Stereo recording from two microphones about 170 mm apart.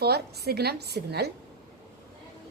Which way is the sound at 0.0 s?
70° right (ahead or behind).